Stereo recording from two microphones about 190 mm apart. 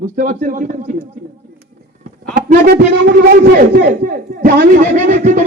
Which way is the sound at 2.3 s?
55° right (ahead or behind).